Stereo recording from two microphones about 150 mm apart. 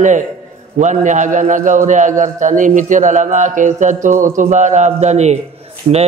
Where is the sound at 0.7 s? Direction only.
55° right (ahead or behind).